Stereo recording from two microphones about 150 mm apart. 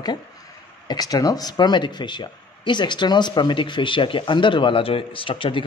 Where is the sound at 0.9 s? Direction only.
25° left (ahead or behind).